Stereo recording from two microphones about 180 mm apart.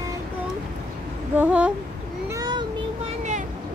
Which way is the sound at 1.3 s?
10° right (ahead or behind).